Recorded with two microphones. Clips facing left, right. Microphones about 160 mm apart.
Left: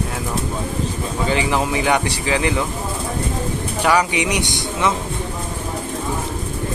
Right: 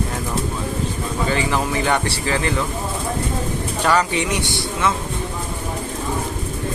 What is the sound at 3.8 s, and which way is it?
Speech, 10° left (ahead or behind).